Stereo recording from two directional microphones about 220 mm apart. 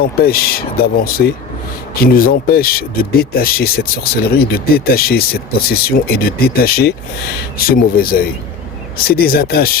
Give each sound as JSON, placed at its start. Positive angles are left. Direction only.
{"t": 0.0, "sound": "speech", "side_deg": 45}